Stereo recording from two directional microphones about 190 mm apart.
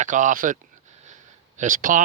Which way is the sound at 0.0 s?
40° right (ahead or behind).